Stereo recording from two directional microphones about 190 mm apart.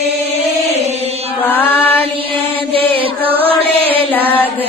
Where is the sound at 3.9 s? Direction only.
10° left (ahead or behind).